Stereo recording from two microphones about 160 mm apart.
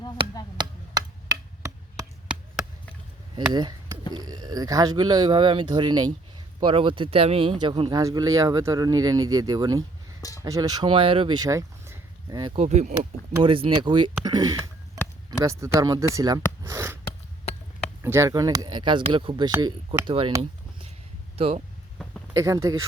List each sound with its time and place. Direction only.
0.5 s chop: 25° right (ahead or behind)
3.5 s a man's voice: 25° right (ahead or behind)
10.2 s a sound: 20° left (ahead or behind)
10.4 s speech: 25° right (ahead or behind)
12.5 s speech: 45° right (ahead or behind)
13.4 s a man's voice: 35° right (ahead or behind); by 17.0 s 15° right (ahead or behind)
17.0 s a sound: 40° left (ahead or behind)
18.0 s a man's voice: 15° right (ahead or behind); by 20.3 s 30° right (ahead or behind)
20.4 s a sound: 35° right (ahead or behind)
21.3 s speech: 40° right (ahead or behind)
22.3 s speech: 20° right (ahead or behind)